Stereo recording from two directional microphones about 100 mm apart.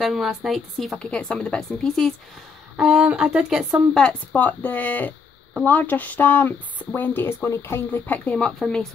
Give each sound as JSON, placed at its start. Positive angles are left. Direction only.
{"t": 0.0, "sound": "speech", "side_deg": -5}
{"t": 2.8, "sound": "speech", "side_deg": -10}
{"t": 3.9, "sound": "speech", "side_deg": 10}